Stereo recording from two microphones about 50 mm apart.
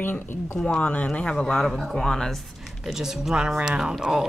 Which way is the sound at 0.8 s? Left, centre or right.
Left.